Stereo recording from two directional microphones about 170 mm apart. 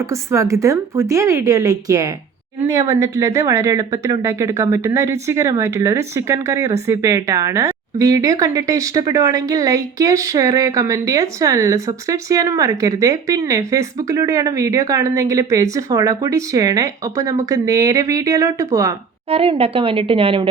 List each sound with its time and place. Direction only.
0.0 s speech: 15° right (ahead or behind)
19.3 s a woman's voice: 35° right (ahead or behind)